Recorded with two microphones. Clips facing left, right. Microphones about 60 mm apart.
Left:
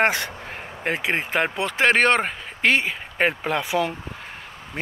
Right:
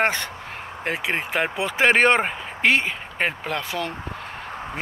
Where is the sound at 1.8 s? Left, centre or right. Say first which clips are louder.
Right 1 dB; centre.